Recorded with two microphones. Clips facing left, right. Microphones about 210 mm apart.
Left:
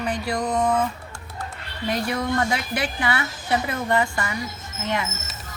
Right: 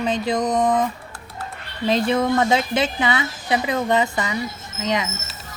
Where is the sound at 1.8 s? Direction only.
25° right (ahead or behind).